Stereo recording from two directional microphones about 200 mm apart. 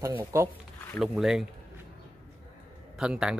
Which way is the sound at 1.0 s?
Centre (ahead or behind).